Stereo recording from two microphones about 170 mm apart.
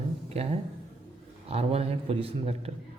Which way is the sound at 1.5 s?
35° right (ahead or behind).